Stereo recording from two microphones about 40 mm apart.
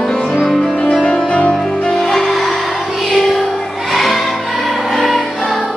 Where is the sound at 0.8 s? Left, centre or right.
Left.